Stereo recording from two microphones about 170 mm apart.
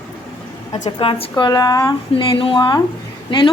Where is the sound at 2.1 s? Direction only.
30° left (ahead or behind).